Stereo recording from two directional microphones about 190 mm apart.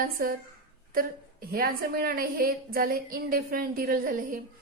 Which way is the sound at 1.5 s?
50° right (ahead or behind).